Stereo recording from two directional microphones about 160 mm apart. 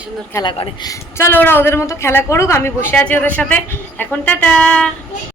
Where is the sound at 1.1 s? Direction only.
15° left (ahead or behind).